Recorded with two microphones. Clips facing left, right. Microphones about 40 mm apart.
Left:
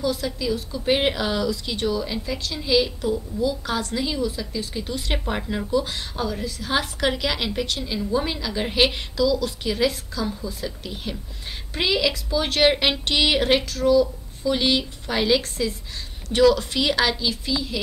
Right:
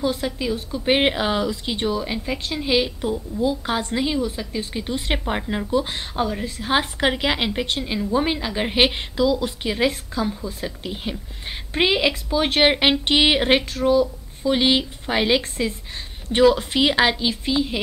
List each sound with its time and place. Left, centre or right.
0.0 s a woman's voice: right